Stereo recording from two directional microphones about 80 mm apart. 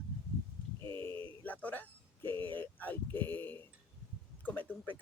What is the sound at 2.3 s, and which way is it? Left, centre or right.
Speech, right.